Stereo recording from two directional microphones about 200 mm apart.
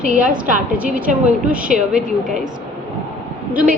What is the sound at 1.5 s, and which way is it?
Speech, 5° right (ahead or behind).